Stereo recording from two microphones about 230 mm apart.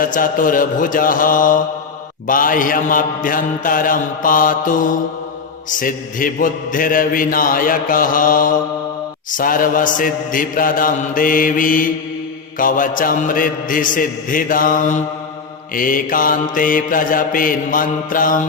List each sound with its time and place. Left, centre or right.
0.0 s a man's voice: left